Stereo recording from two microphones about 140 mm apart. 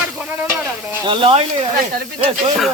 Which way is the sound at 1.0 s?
35° right (ahead or behind).